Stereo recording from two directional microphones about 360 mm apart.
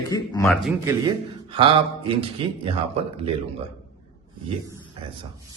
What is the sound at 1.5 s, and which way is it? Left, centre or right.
Speech, centre.